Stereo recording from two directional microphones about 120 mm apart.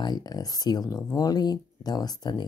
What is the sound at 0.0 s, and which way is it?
Speech, 35° left (ahead or behind).